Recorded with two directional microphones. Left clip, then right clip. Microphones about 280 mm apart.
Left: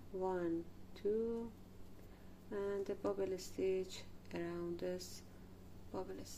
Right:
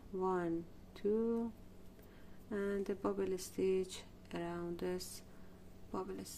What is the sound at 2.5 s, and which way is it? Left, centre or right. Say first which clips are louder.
Speech: right 2 dB; centre.